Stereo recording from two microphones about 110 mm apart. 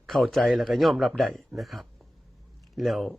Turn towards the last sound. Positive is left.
turn(degrees=0)  # may be behind; listen again after turning